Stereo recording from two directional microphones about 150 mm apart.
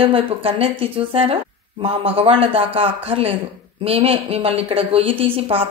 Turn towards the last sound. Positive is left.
turn(degrees=-35)  # may be behind; listen again after turning